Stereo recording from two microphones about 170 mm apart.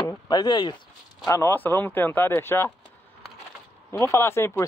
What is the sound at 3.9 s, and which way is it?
Speech, 15° left (ahead or behind).